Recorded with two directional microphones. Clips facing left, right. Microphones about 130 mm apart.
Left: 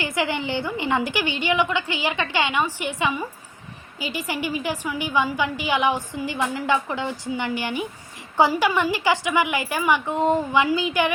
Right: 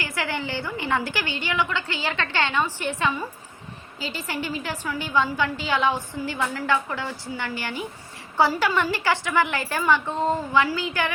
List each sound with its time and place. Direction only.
0.0 s a woman's voice: 20° left (ahead or behind)